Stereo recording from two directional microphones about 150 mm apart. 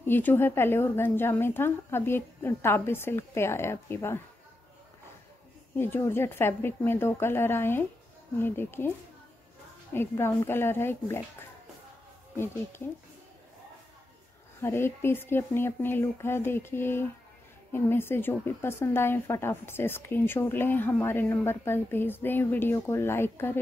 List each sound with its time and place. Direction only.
0.0 s a woman's voice: 15° left (ahead or behind)
5.8 s a woman's voice: 15° left (ahead or behind)
9.9 s a woman's voice: 15° left (ahead or behind)
14.6 s a woman's voice: 15° left (ahead or behind)